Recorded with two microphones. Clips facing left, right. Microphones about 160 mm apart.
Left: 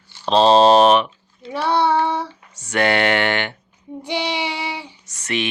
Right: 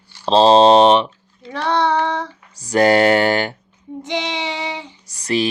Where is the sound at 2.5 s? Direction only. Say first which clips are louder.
Right 5 dB; 35° right (ahead or behind).